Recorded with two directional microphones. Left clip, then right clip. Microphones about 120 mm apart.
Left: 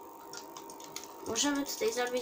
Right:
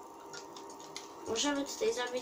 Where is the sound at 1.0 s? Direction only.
50° left (ahead or behind).